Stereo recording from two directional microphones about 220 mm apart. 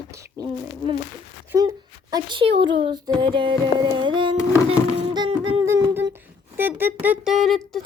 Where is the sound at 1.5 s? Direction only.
15° right (ahead or behind).